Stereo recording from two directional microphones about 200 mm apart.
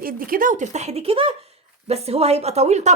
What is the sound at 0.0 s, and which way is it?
Speech, 45° right (ahead or behind).